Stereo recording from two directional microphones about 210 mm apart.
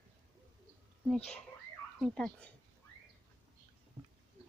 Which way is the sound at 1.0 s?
5° left (ahead or behind).